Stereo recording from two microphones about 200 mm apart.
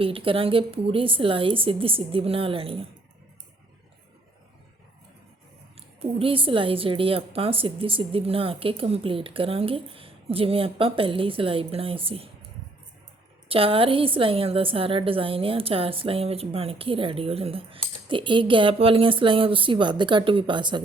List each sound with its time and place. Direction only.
0.0 s a woman's voice: 25° right (ahead or behind)
6.0 s a woman's voice: 30° right (ahead or behind)
13.5 s a woman's voice: 25° right (ahead or behind)